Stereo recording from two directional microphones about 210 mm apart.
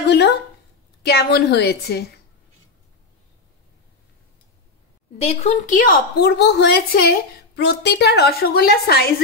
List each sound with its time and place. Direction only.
0.1 s a woman's voice: 50° left (ahead or behind)
5.2 s a woman's voice: 30° left (ahead or behind); by 9.1 s 50° left (ahead or behind)